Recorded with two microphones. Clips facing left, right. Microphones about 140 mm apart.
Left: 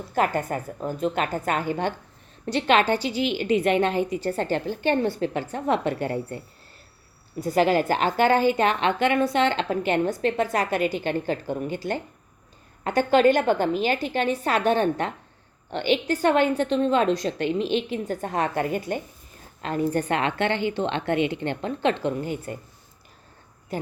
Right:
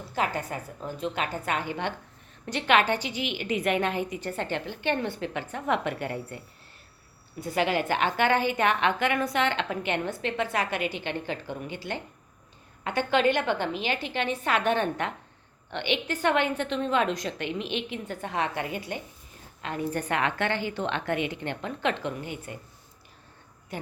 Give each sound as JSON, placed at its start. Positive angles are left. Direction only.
{"t": 0.1, "sound": "a woman's voice", "side_deg": 50}
{"t": 2.5, "sound": "a woman's voice", "side_deg": 30}
{"t": 19.6, "sound": "a woman's voice", "side_deg": 35}